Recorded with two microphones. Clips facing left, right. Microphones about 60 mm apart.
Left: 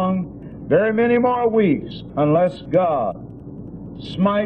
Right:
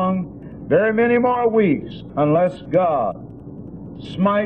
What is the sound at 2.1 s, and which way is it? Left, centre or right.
A man's voice, centre.